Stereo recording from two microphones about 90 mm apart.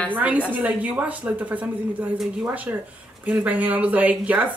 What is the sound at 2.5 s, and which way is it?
Speech, 15° right (ahead or behind).